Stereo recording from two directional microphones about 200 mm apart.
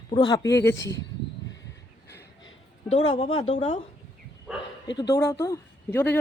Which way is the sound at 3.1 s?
25° left (ahead or behind).